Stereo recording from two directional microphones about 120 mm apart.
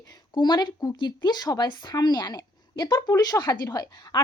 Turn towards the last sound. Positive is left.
turn(degrees=30)  # may be behind; listen again after turning